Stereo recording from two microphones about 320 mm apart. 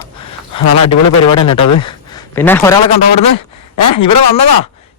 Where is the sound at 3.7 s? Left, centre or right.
Left.